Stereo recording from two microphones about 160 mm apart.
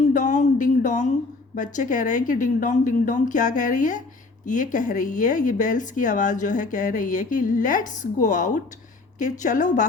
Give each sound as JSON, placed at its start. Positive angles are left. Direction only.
{"t": 0.1, "sound": "speech", "side_deg": 50}